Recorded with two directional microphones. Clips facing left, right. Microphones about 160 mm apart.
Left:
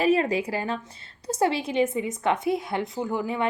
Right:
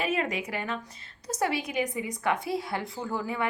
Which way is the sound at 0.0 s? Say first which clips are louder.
Left 7 dB; 35° left (ahead or behind).